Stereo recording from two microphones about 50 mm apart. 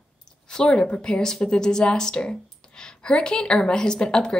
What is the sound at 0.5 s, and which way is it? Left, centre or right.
Speech, centre.